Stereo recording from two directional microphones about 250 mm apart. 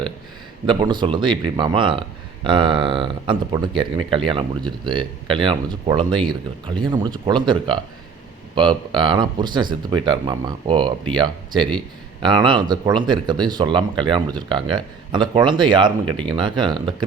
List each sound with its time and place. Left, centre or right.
0.7 s speech: centre